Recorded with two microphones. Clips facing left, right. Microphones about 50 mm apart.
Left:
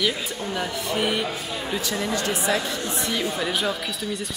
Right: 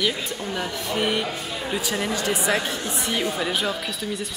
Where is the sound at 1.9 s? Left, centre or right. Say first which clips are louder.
Right 1 dB; right.